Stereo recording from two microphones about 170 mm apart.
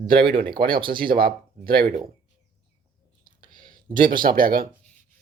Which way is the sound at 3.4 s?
50° right (ahead or behind).